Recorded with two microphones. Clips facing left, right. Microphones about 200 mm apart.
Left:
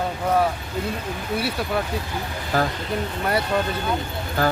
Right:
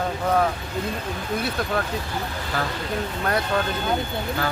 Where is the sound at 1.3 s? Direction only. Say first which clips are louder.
Left 1 dB; 10° left (ahead or behind).